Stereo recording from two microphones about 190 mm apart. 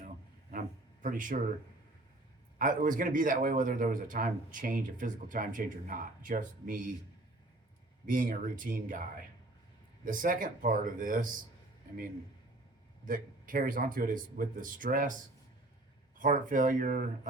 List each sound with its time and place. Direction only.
1.0 s a man's voice: 45° right (ahead or behind)
2.6 s a man's voice: 45° right (ahead or behind)
8.0 s a man's voice: 45° right (ahead or behind)
10.0 s a man's voice: 45° right (ahead or behind)
13.1 s a man's voice: 45° right (ahead or behind)
16.1 s a man's voice: 45° right (ahead or behind)